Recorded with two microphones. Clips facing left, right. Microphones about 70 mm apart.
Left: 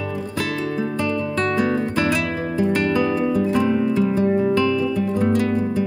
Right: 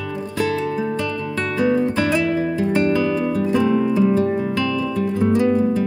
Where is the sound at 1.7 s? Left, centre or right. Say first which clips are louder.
Right 2 dB; right.